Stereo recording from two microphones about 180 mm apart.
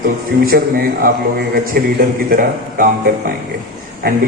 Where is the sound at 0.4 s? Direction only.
55° right (ahead or behind).